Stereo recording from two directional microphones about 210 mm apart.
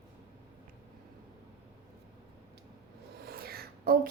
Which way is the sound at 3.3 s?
45° right (ahead or behind).